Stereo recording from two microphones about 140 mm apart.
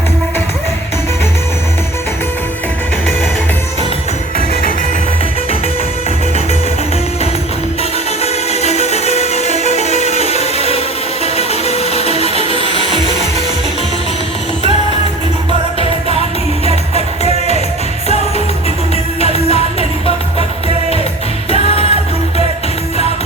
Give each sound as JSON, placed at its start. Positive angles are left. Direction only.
{"t": 8.2, "sound": "music", "side_deg": 50}
{"t": 12.1, "sound": "a sound", "side_deg": 45}
{"t": 12.5, "sound": "music", "side_deg": -40}
{"t": 16.9, "sound": "music", "side_deg": 50}
{"t": 21.5, "sound": "music", "side_deg": 45}